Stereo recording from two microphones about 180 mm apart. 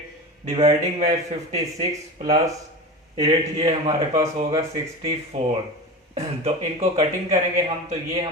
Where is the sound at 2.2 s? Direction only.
25° right (ahead or behind).